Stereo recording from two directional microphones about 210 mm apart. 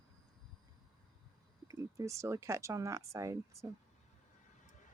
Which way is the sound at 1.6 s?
15° right (ahead or behind).